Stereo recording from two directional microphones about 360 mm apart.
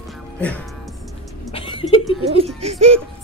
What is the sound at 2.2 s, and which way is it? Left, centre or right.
Speech, centre.